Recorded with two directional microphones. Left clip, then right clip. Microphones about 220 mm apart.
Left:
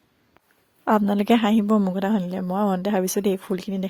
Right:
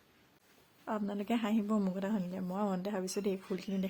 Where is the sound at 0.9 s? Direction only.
50° left (ahead or behind).